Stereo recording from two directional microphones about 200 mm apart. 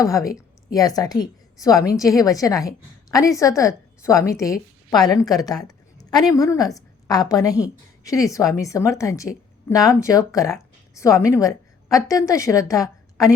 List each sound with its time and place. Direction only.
0.0 s a woman's voice: 15° left (ahead or behind)